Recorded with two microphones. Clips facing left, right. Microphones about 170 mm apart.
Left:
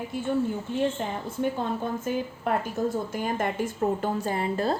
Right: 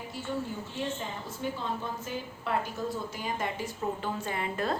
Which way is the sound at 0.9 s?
55° left (ahead or behind).